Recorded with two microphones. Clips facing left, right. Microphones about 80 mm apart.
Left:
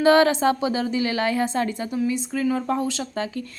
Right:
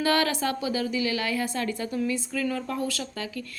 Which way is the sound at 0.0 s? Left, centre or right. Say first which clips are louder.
Left 8 dB; left.